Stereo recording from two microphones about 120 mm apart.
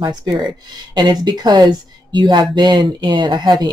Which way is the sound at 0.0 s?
35° right (ahead or behind).